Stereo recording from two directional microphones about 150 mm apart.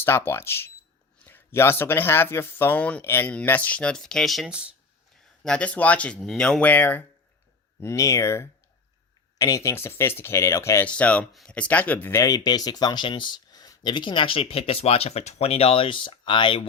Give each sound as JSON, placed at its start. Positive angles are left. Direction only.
{"t": 0.0, "sound": "speech", "side_deg": 15}
{"t": 5.4, "sound": "speech", "side_deg": 5}